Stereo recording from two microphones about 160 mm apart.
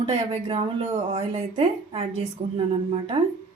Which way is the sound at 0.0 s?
35° right (ahead or behind).